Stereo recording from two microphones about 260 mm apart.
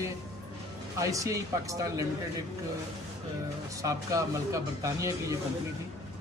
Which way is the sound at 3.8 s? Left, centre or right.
Centre.